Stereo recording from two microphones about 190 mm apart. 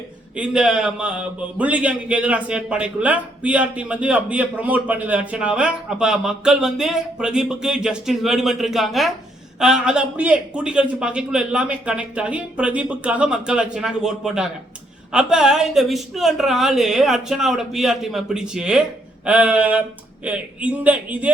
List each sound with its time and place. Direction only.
0.3 s speech: 5° right (ahead or behind)